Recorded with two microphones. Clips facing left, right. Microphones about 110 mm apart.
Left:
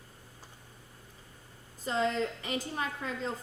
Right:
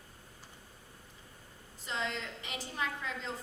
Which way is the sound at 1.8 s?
40° left (ahead or behind).